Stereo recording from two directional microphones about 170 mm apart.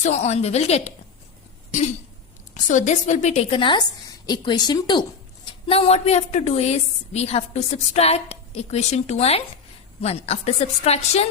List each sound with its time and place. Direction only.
0.0 s a woman's voice: 40° left (ahead or behind)
2.6 s a woman's voice: 45° left (ahead or behind)
3.6 s a woman's voice: 25° left (ahead or behind)